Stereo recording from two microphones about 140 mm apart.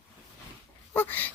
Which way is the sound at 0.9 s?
15° left (ahead or behind).